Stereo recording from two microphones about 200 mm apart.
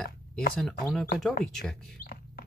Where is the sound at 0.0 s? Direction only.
50° left (ahead or behind).